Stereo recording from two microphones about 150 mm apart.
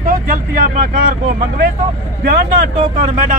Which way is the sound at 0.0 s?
65° right (ahead or behind).